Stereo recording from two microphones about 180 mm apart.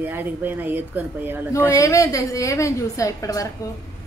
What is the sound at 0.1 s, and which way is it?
Speech, 10° right (ahead or behind).